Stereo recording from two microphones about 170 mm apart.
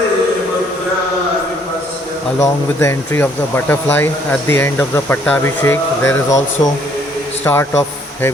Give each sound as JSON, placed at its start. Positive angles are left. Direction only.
{"t": 2.4, "sound": "a man's voice", "side_deg": 15}